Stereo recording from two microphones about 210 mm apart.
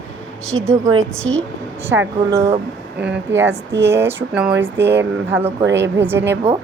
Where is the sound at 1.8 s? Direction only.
10° right (ahead or behind).